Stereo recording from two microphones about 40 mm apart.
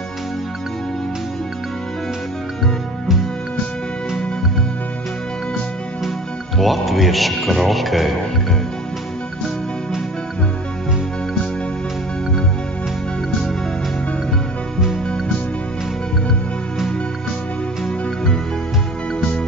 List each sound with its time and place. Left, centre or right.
6.6 s speech: centre
17.8 s music: centre